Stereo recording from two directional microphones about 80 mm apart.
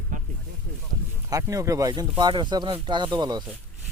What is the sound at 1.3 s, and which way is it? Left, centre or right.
Speech, right.